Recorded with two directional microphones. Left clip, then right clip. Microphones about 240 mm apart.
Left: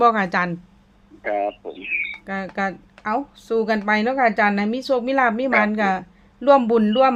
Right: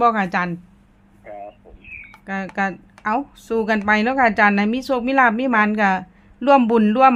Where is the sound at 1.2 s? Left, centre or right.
Left.